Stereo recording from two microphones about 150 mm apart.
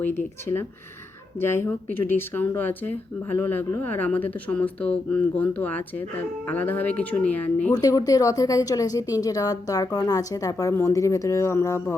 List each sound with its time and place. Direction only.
0.0 s speech: 15° left (ahead or behind)
7.7 s a woman's voice: 25° left (ahead or behind)